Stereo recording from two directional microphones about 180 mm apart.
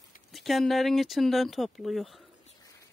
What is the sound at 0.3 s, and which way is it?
Speech, centre (ahead or behind).